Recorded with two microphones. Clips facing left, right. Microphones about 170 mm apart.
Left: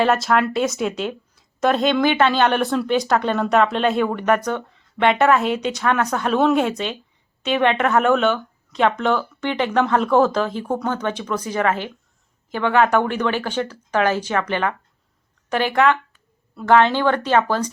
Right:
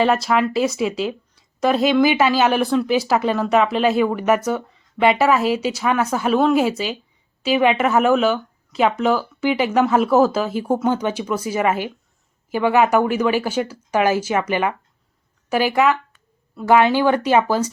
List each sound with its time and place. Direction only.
0.0 s speech: centre (ahead or behind)